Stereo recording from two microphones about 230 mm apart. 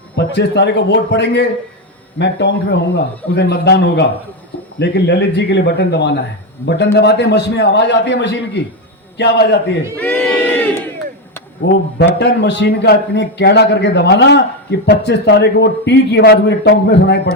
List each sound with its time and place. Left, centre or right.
0.3 s a man's voice: left
10.0 s crowd: centre
11.6 s a man's voice: left